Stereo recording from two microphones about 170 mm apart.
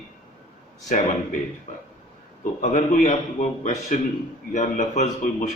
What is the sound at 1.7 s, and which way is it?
Speech, 45° left (ahead or behind).